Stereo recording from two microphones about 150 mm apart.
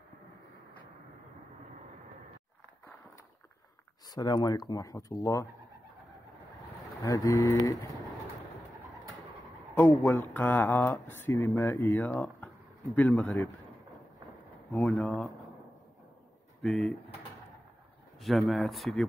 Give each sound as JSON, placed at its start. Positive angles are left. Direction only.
{"t": 4.1, "sound": "speech", "side_deg": 30}
{"t": 7.0, "sound": "speech", "side_deg": 25}
{"t": 10.0, "sound": "speech", "side_deg": 15}
{"t": 14.7, "sound": "speech", "side_deg": 10}
{"t": 16.6, "sound": "speech", "side_deg": 0}
{"t": 18.2, "sound": "speech", "side_deg": 0}